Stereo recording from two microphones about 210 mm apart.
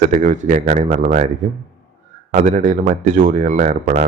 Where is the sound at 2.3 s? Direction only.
35° right (ahead or behind).